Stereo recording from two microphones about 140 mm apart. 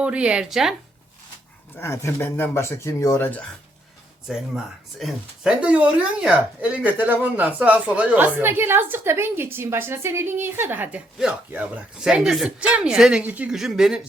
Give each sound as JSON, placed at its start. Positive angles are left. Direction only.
{"t": 0.0, "sound": "speech", "side_deg": -10}
{"t": 1.7, "sound": "speech", "side_deg": 20}
{"t": 4.3, "sound": "speech", "side_deg": 0}